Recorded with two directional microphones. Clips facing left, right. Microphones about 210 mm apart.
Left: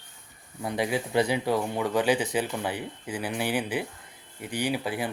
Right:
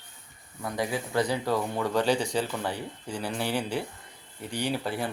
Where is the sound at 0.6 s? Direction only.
20° left (ahead or behind).